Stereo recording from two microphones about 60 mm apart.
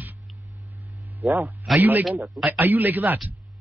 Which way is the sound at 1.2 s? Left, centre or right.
Right.